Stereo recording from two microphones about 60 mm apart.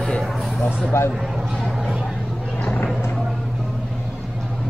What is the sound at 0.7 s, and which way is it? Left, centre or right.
Speech, centre.